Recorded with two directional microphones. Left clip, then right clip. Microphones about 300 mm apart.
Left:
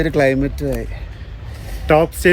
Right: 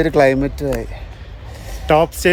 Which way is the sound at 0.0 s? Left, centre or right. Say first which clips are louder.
Right 2 dB; centre.